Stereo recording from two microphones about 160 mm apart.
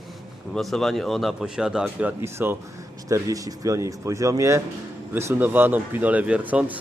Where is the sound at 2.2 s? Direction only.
15° right (ahead or behind).